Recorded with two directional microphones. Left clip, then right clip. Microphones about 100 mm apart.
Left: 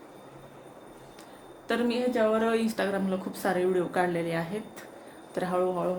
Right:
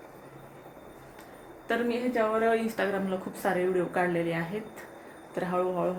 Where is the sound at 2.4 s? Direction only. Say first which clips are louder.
Right 1 dB; 30° left (ahead or behind).